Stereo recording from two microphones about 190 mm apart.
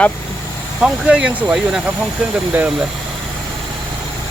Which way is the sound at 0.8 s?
5° right (ahead or behind).